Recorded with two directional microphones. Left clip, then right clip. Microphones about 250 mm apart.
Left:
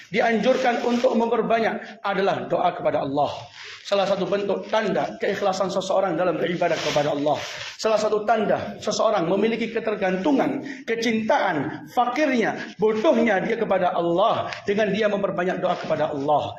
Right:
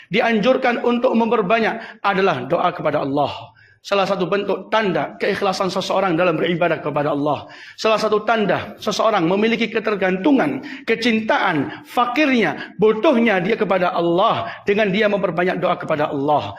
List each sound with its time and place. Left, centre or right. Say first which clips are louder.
0.1 s a man's voice: right 4 dB; right